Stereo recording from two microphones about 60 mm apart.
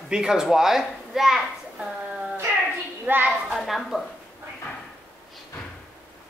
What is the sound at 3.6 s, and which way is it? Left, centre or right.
Speech, centre.